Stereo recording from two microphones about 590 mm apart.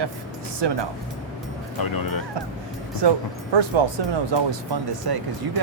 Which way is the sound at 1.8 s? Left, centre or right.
Left.